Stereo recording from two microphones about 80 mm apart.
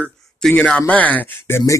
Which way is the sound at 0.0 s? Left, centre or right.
Centre.